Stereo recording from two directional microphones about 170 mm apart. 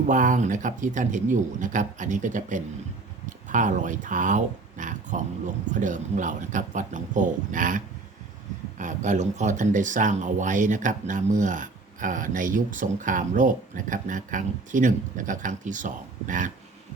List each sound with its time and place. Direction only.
0.1 s speech: 50° right (ahead or behind)
8.8 s speech: 45° right (ahead or behind)